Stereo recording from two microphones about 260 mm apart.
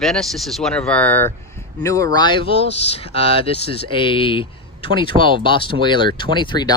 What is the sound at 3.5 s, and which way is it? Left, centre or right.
Speech, left.